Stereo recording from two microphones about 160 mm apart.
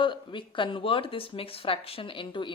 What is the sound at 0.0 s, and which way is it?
Speech, 30° left (ahead or behind).